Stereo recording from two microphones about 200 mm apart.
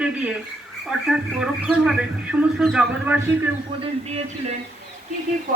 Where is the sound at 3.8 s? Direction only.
30° right (ahead or behind).